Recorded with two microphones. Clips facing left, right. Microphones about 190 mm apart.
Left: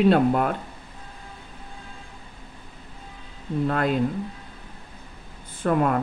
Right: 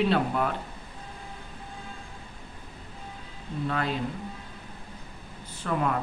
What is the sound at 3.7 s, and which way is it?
Speech, 50° left (ahead or behind).